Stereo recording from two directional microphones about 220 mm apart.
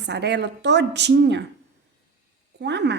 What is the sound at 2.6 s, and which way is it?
Speech, 50° right (ahead or behind).